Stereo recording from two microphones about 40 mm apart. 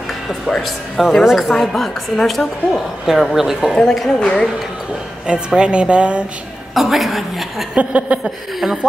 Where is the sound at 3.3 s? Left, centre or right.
Centre.